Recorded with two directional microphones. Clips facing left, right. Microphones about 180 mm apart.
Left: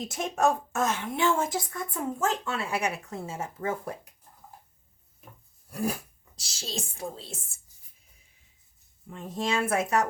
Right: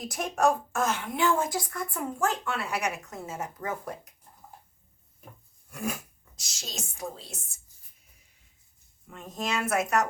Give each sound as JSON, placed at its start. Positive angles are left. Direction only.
{"t": 0.0, "sound": "speech", "side_deg": 25}
{"t": 5.7, "sound": "speech", "side_deg": 35}
{"t": 9.0, "sound": "speech", "side_deg": 30}